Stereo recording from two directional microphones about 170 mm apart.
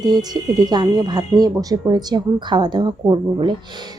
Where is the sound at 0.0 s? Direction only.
25° right (ahead or behind).